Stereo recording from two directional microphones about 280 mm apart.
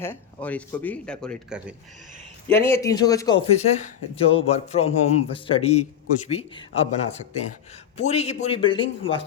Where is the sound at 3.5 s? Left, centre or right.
Left.